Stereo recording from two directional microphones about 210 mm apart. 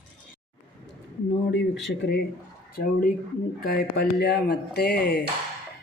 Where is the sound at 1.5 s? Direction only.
60° left (ahead or behind).